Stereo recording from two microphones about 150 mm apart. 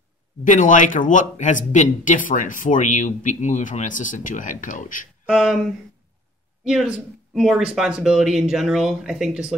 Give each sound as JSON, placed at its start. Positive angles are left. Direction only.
{"t": 0.4, "sound": "speech", "side_deg": 60}
{"t": 5.3, "sound": "speech", "side_deg": -5}
{"t": 6.6, "sound": "speech", "side_deg": -5}